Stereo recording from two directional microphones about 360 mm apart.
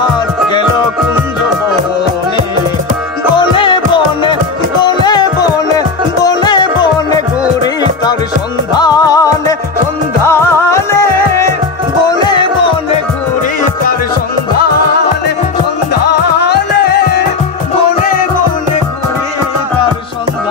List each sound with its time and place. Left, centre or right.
3.3 s music: centre
15.9 s music: left